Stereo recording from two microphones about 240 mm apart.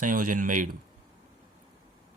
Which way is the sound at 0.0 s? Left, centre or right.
Right.